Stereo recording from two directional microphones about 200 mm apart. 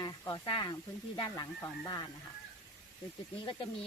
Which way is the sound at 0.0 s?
20° left (ahead or behind).